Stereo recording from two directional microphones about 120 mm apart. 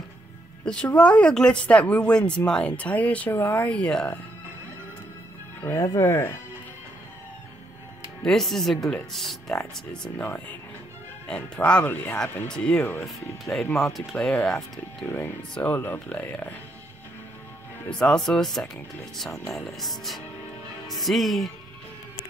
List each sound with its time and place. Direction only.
0.7 s speech: 10° left (ahead or behind)
5.6 s speech: 25° left (ahead or behind)
8.2 s speech: 5° left (ahead or behind)
15.0 s speech: 20° left (ahead or behind)
17.8 s speech: 10° left (ahead or behind)